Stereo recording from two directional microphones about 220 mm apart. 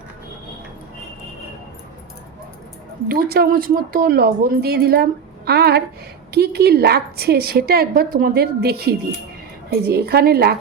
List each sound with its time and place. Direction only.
3.1 s a woman's voice: 45° right (ahead or behind)